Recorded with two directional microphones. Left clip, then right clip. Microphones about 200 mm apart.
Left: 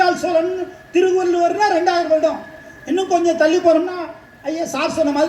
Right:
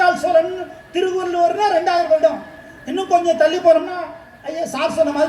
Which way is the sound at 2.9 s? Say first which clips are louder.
Right 1 dB; 20° left (ahead or behind).